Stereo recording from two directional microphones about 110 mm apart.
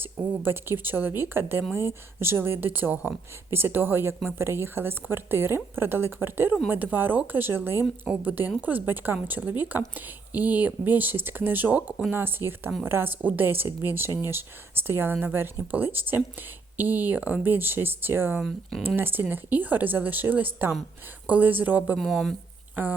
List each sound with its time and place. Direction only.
0.0 s speech: 20° right (ahead or behind)
18.3 s speech: centre (ahead or behind)
18.9 s speech: 20° right (ahead or behind)
21.9 s speech: centre (ahead or behind)
22.7 s a sound: 15° right (ahead or behind)